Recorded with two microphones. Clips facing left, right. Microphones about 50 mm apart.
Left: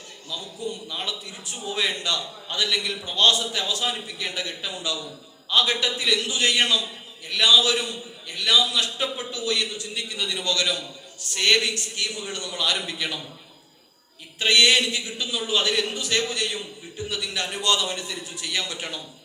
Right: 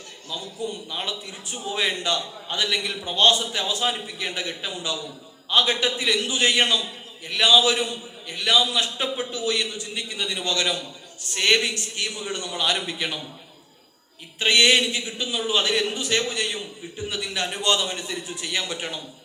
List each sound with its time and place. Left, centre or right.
0.6 s a man's voice: right
14.3 s a man's voice: right